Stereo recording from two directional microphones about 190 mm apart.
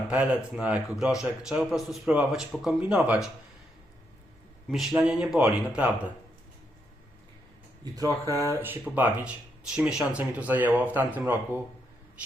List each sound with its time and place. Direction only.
0.1 s speech: 5° right (ahead or behind)
4.7 s speech: centre (ahead or behind)
8.3 s speech: 15° right (ahead or behind)